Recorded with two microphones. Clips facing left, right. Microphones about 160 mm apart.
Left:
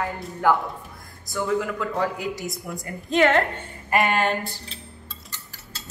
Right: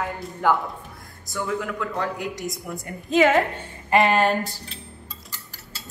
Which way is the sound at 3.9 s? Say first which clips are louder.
Right 3 dB; 35° right (ahead or behind).